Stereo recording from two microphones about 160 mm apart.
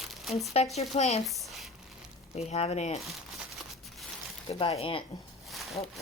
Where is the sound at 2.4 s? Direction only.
40° left (ahead or behind).